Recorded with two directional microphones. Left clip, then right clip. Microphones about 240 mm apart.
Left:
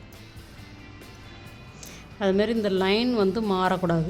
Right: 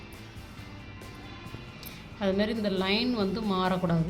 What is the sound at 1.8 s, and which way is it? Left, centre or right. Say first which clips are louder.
A woman's voice: left 5 dB; left.